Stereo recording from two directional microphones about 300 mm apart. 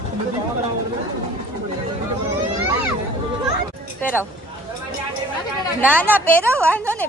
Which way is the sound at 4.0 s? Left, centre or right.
Centre.